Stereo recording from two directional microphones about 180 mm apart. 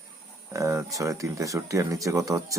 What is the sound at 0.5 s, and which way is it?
Speech, 15° right (ahead or behind).